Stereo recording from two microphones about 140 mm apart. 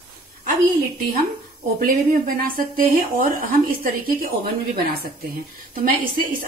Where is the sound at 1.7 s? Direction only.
90° right.